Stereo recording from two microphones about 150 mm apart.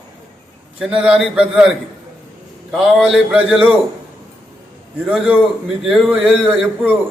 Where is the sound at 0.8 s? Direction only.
5° right (ahead or behind).